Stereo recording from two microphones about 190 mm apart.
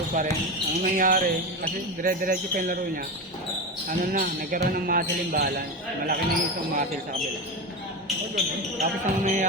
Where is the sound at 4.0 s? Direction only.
45° right (ahead or behind).